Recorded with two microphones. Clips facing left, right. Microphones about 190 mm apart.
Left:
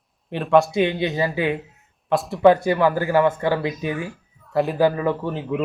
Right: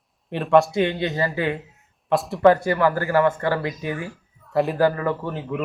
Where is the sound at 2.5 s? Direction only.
15° left (ahead or behind).